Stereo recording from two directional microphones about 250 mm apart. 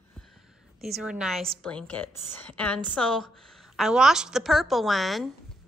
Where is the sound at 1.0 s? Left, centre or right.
Centre.